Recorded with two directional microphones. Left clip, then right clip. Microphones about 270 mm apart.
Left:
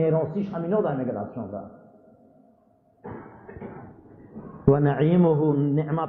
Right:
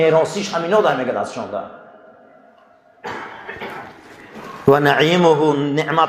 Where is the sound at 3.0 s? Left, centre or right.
Centre.